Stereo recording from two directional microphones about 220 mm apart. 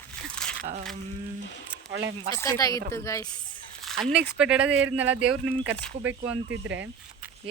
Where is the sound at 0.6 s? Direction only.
30° right (ahead or behind).